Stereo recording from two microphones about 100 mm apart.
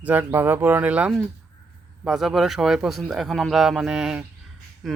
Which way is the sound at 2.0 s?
Centre (ahead or behind).